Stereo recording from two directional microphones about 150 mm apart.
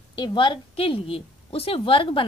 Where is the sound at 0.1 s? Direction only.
30° left (ahead or behind).